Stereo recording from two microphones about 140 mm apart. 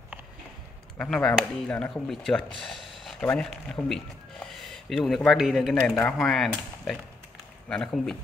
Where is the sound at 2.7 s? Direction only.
Centre (ahead or behind).